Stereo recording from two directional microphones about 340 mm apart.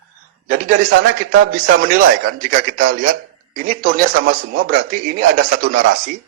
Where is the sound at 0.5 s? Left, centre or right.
Right.